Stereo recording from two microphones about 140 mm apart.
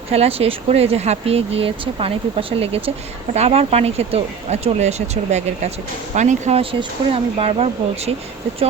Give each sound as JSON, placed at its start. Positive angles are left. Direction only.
{"t": 0.1, "sound": "speech", "side_deg": -45}